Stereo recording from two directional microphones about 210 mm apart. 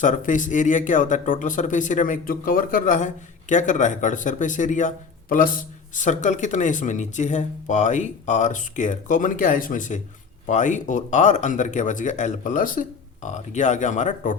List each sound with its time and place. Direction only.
0.0 s speech: 35° left (ahead or behind)